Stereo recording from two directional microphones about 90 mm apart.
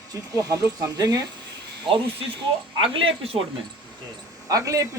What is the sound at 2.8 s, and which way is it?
Speech, 90° right.